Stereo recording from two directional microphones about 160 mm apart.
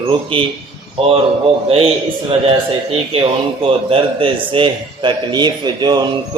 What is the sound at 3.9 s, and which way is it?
A man's voice, 35° right (ahead or behind).